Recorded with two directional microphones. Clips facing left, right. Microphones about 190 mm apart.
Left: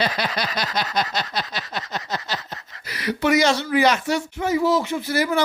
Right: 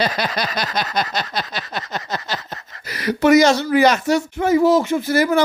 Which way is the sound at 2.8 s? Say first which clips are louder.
Right 6 dB; 45° right (ahead or behind).